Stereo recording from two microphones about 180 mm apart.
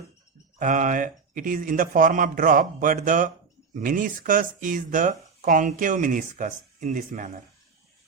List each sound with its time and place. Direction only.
0.6 s speech: 45° right (ahead or behind)